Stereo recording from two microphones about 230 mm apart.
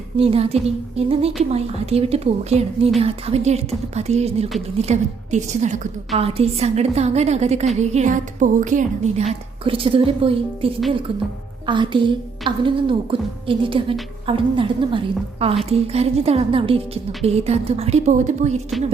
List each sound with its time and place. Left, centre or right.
0.2 s a woman's voice: right
9.6 s a woman's voice: right